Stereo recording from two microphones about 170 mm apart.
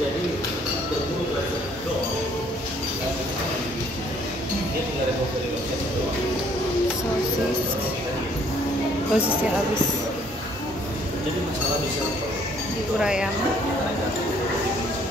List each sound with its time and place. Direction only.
9.1 s speech: 5° right (ahead or behind)
13.0 s speech: 5° right (ahead or behind)